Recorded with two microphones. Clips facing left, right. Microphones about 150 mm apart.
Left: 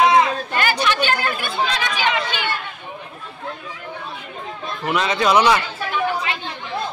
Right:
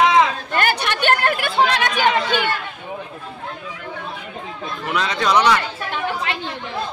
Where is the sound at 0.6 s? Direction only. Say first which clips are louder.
Even; 60° right (ahead or behind).